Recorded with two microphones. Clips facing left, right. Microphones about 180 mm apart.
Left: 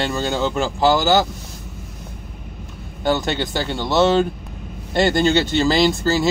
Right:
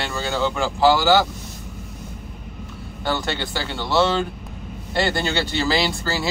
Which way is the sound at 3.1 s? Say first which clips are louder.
Left 5 dB; 20° left (ahead or behind).